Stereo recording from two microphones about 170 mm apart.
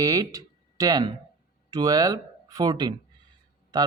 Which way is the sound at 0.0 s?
20° right (ahead or behind).